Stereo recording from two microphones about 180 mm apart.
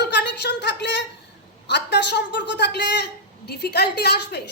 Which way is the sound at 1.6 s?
70° left (ahead or behind).